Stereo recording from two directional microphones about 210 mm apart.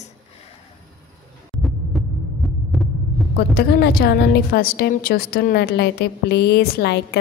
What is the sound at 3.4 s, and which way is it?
A woman's voice, 50° left (ahead or behind).